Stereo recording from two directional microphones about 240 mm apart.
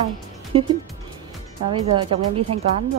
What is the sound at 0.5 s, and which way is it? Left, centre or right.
Speech, right.